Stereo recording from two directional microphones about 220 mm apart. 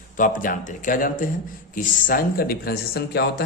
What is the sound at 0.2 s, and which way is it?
Speech, 35° left (ahead or behind).